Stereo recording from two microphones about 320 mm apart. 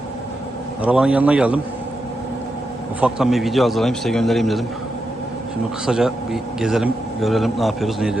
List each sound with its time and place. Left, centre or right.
0.8 s a man's voice: centre
3.0 s a man's voice: centre
5.8 s a man's voice: centre